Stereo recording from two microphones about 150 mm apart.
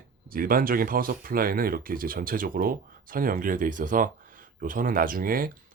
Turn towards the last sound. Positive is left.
turn(degrees=-70)  # may be behind; listen again after turning